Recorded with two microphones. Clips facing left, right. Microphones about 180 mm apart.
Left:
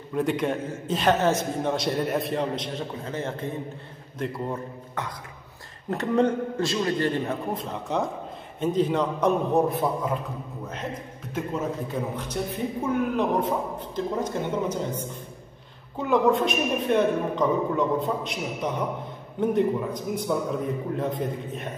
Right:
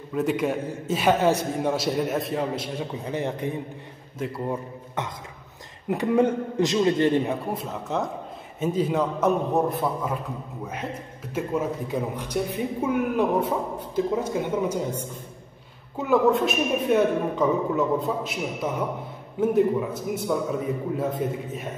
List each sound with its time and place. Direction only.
0.1 s a man's voice: centre (ahead or behind); by 7.3 s 20° right (ahead or behind)
7.5 s a man's voice: centre (ahead or behind)
11.3 s a man's voice: 10° right (ahead or behind)